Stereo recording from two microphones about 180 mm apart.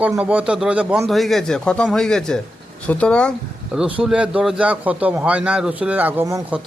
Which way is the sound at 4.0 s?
5° right (ahead or behind).